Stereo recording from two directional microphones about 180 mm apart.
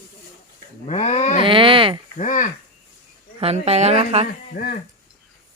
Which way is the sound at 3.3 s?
35° right (ahead or behind).